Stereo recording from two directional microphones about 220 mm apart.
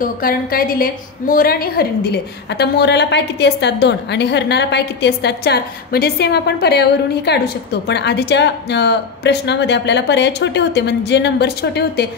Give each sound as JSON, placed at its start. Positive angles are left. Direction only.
{"t": 0.0, "sound": "a woman's voice", "side_deg": 40}